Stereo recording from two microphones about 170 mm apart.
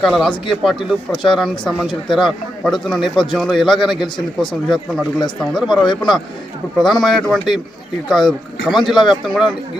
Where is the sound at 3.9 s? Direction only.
25° left (ahead or behind).